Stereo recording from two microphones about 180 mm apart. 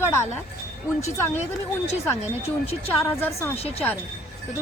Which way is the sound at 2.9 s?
10° left (ahead or behind).